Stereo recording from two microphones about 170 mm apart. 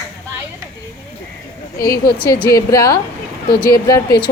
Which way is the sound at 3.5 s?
65° left (ahead or behind).